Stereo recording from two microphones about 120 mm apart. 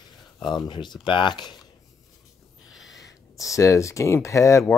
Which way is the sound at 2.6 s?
Centre (ahead or behind).